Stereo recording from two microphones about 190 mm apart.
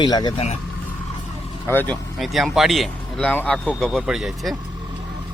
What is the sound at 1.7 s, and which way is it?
Speech, 10° left (ahead or behind).